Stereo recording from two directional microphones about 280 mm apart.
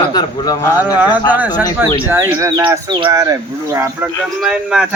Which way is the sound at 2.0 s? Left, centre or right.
Centre.